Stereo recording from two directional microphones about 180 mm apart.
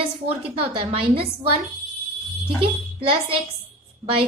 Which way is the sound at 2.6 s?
30° right (ahead or behind).